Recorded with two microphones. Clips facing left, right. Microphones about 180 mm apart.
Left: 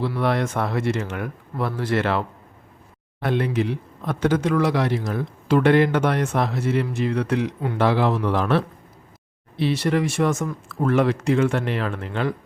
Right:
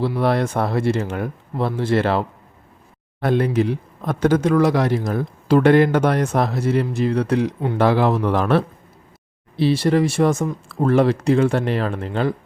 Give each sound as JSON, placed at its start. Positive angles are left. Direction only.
{"t": 0.2, "sound": "a man's voice", "side_deg": -35}
{"t": 9.6, "sound": "a man's voice", "side_deg": -30}